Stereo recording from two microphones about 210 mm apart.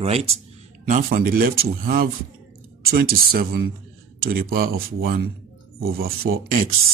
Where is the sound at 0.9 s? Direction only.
45° right (ahead or behind).